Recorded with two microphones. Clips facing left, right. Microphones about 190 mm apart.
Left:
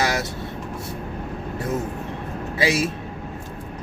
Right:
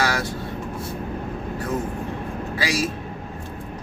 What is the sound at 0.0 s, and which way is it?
Vehicle, 20° left (ahead or behind).